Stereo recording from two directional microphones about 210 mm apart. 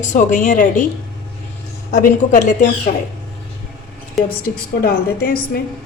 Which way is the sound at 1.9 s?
35° left (ahead or behind).